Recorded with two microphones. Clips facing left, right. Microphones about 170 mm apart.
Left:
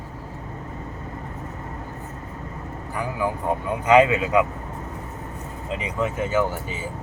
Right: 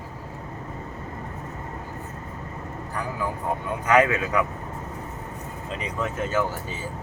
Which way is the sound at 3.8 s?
20° left (ahead or behind).